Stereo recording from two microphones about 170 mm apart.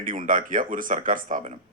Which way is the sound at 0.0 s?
50° right (ahead or behind).